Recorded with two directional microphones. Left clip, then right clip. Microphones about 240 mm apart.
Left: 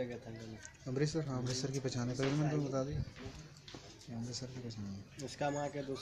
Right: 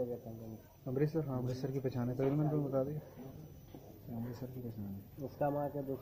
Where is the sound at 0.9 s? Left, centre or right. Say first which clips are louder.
Right 2 dB; centre.